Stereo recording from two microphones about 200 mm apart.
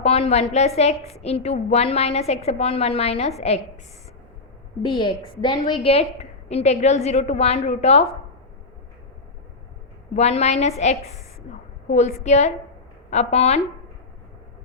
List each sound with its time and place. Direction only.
0.0 s a woman's voice: 30° left (ahead or behind)
4.8 s a woman's voice: 25° left (ahead or behind)
10.2 s a woman's voice: 35° left (ahead or behind)